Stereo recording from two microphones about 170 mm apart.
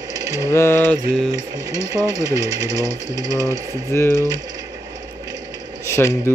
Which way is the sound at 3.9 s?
15° left (ahead or behind).